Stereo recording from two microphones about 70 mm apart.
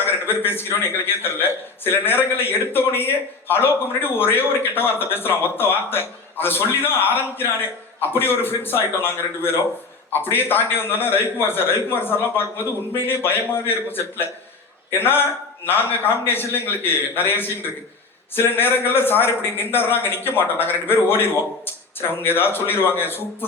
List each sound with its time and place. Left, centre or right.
0.0 s a man's voice: left